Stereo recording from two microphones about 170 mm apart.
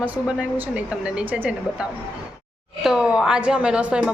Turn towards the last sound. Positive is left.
turn(degrees=-5)  # may be behind; listen again after turning